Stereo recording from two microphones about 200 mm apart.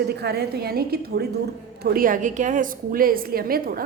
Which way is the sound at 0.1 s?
55° right (ahead or behind).